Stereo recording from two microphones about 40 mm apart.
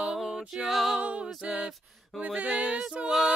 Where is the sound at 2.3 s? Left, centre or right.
Right.